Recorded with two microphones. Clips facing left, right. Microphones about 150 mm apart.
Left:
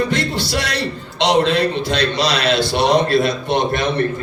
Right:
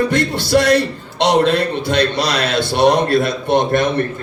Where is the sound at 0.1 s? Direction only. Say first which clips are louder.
Right 5 dB; 50° right (ahead or behind).